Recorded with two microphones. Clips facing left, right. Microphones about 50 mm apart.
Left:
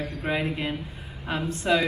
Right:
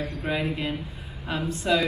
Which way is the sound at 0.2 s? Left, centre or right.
Left.